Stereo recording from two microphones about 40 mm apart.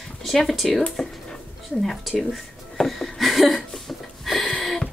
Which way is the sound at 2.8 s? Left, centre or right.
Centre.